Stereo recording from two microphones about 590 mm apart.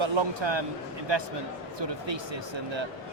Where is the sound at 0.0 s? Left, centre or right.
Right.